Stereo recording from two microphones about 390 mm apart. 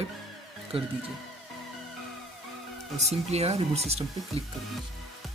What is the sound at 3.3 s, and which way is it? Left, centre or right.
Speech, centre.